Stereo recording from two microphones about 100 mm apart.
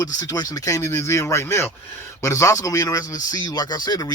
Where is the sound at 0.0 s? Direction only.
40° left (ahead or behind).